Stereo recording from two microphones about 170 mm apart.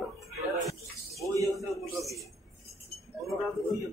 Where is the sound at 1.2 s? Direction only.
20° right (ahead or behind).